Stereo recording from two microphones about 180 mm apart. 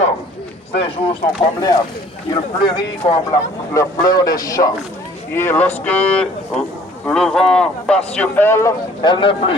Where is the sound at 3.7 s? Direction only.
20° left (ahead or behind).